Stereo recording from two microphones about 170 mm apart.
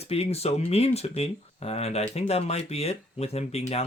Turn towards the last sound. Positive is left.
turn(degrees=40)  # may be behind; listen again after turning